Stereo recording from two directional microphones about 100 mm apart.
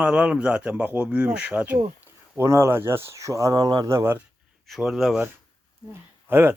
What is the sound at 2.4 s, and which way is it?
Speech, 25° right (ahead or behind).